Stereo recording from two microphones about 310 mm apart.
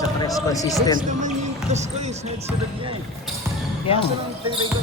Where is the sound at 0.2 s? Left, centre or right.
Centre.